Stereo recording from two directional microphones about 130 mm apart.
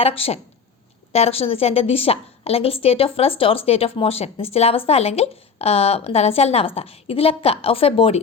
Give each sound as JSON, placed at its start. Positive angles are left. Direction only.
{"t": 0.0, "sound": "a woman's voice", "side_deg": 50}